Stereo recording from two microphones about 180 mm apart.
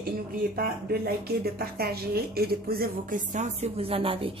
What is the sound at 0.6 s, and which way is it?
A woman's voice, 60° right (ahead or behind).